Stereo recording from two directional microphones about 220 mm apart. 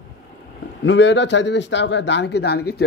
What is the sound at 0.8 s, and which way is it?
Speech, 55° left (ahead or behind).